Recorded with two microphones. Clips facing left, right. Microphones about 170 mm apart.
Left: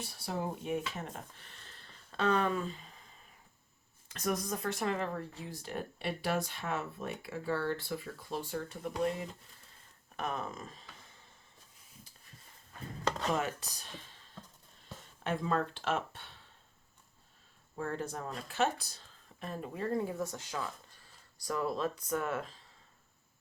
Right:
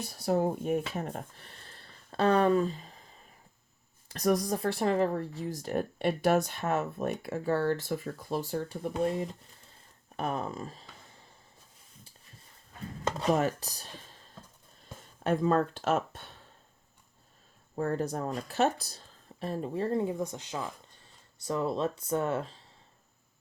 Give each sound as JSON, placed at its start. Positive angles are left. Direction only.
{"t": 0.0, "sound": "speech", "side_deg": -40}
{"t": 1.4, "sound": "a sound", "side_deg": -40}
{"t": 4.1, "sound": "speech", "side_deg": -35}
{"t": 13.3, "sound": "speech", "side_deg": -35}
{"t": 15.2, "sound": "speech", "side_deg": -40}
{"t": 17.7, "sound": "speech", "side_deg": -40}